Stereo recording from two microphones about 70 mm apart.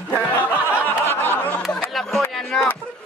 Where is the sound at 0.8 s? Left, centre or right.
Left.